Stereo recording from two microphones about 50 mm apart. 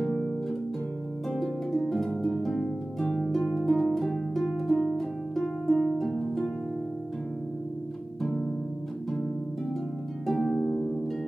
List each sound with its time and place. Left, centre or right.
0.0 s music: centre
1.7 s harp: centre
3.0 s harp: centre
3.5 s harp: centre
10.2 s harp: centre
10.6 s harp: centre